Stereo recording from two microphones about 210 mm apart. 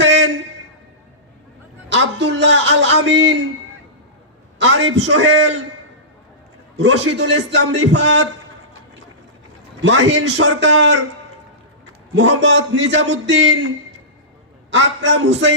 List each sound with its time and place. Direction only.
0.0 s a sound: 60° right (ahead or behind)
1.9 s a man's voice: 60° right (ahead or behind)
4.5 s a man's voice: 60° right (ahead or behind)
6.7 s a man's voice: 55° right (ahead or behind)
9.8 s a man's voice: 60° right (ahead or behind)
12.1 s a man's voice: 60° right (ahead or behind)
14.7 s a man's voice: 55° right (ahead or behind)